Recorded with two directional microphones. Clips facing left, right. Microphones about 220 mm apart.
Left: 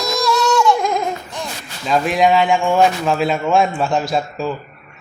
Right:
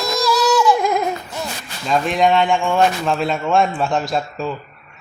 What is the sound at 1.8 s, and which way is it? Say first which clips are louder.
Speech: left 1 dB; 5° left (ahead or behind).